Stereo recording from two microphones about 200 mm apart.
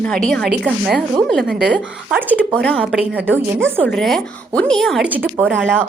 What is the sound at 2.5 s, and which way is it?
Speech, 5° left (ahead or behind).